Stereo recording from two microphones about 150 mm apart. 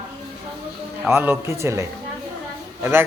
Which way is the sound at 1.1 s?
15° right (ahead or behind).